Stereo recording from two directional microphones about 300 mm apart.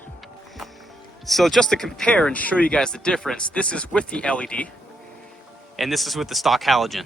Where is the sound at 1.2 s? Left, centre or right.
Centre.